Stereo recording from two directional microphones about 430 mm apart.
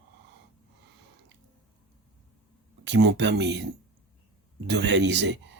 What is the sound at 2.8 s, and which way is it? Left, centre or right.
Speech, right.